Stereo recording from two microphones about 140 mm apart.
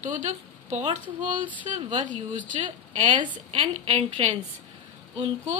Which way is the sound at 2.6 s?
55° right (ahead or behind).